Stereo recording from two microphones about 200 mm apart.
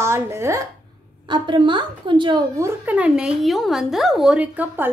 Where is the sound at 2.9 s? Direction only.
5° right (ahead or behind).